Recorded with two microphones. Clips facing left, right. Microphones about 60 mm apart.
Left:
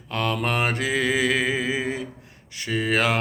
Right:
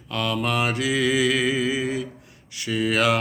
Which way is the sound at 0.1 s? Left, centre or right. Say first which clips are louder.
Even; left.